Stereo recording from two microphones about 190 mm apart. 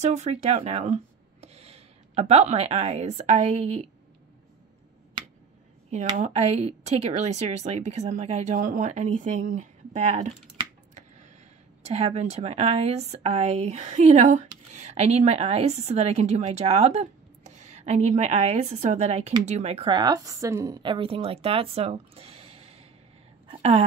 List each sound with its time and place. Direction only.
0.0 s speech: 35° right (ahead or behind)
5.2 s finger snapping: 25° right (ahead or behind)
5.9 s speech: 40° right (ahead or behind)
11.8 s a woman's voice: 35° right (ahead or behind)
23.5 s a sound: 35° right (ahead or behind)